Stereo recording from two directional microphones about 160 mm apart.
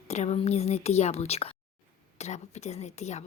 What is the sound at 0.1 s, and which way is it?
A woman's voice, 45° left (ahead or behind).